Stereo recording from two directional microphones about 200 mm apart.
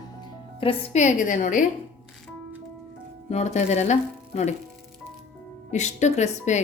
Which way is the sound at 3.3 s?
35° left (ahead or behind).